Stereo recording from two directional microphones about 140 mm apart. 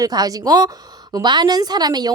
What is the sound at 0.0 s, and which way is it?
A woman's voice, 25° right (ahead or behind).